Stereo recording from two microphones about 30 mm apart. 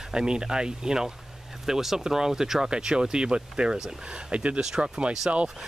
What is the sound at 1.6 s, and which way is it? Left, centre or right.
Speech, centre.